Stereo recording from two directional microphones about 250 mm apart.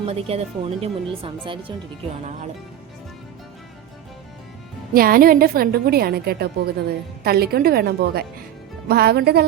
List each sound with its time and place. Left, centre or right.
0.1 s speech: right
4.9 s a woman's voice: right